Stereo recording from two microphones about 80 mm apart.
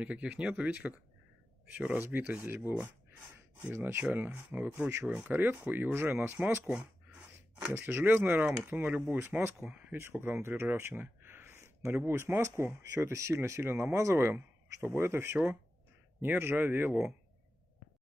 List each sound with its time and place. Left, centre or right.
0.0 s speech: centre
4.0 s speech: centre
9.7 s speech: centre
9.9 s speech: right